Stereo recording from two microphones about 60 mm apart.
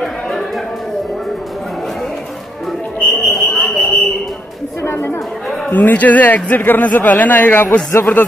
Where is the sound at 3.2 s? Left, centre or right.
Centre.